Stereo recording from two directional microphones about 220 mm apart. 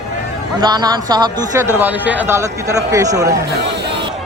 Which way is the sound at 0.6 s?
20° right (ahead or behind).